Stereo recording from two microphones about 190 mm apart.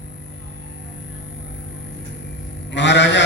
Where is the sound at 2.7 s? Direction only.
65° left (ahead or behind).